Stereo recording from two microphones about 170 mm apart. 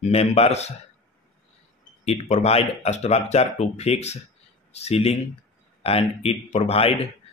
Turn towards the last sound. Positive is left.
turn(degrees=35)  # may be behind; listen again after turning